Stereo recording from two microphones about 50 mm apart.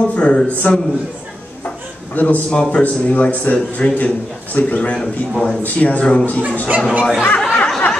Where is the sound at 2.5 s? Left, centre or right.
Centre.